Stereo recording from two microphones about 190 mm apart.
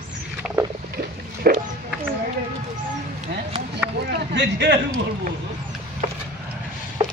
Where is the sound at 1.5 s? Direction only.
50° right (ahead or behind).